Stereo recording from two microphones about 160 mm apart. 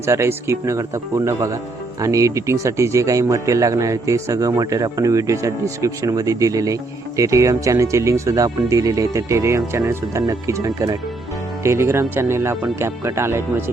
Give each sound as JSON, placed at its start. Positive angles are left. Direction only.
{"t": 0.0, "sound": "speech", "side_deg": -15}